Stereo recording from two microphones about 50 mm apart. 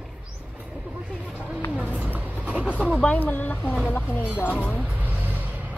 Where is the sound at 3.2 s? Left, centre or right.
Left.